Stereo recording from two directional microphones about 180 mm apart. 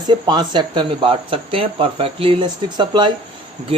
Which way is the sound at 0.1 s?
25° right (ahead or behind).